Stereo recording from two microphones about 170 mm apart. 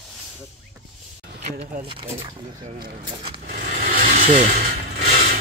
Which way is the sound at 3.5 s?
50° right (ahead or behind).